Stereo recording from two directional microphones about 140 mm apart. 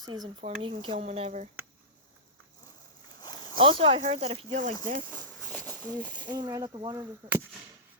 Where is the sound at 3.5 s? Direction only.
40° right (ahead or behind).